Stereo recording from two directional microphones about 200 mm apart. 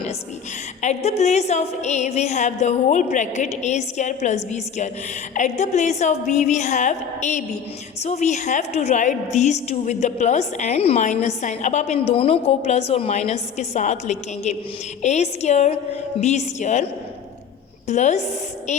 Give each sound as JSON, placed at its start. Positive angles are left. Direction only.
{"t": 0.8, "sound": "a woman's voice", "side_deg": 35}